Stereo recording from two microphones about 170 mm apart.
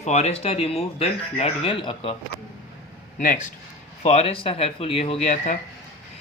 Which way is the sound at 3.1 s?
50° left (ahead or behind).